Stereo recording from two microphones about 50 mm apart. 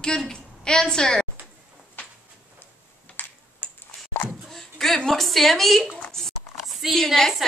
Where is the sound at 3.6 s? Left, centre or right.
Left.